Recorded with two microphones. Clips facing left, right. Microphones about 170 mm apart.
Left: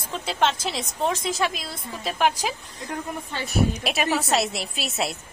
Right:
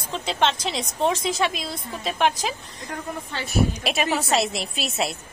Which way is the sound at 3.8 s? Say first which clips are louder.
Even; centre (ahead or behind).